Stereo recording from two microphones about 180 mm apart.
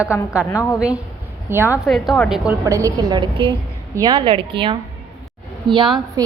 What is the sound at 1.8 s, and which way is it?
Speech, centre (ahead or behind).